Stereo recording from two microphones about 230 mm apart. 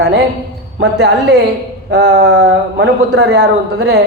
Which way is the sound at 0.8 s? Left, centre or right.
Right.